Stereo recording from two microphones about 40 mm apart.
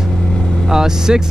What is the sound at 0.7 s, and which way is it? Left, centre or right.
Speech, centre.